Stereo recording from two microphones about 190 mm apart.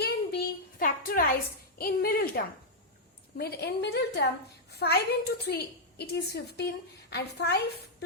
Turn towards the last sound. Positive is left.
turn(degrees=60)  # may be behind; listen again after turning